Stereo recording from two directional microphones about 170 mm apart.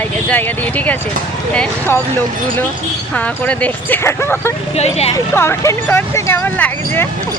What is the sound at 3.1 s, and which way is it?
Speech, 10° left (ahead or behind).